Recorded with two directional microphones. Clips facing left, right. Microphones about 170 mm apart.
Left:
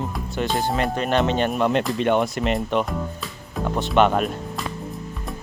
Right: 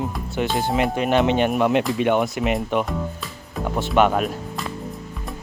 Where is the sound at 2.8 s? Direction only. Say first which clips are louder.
Right 1 dB; centre (ahead or behind).